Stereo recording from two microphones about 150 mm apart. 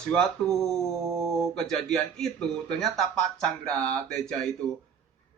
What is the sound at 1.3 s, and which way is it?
Speech, centre (ahead or behind).